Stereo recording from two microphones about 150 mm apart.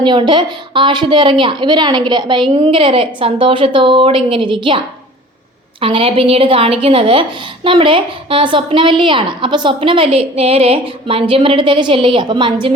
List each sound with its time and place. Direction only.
0.0 s a woman's voice: 30° right (ahead or behind)
5.8 s a woman's voice: 35° right (ahead or behind)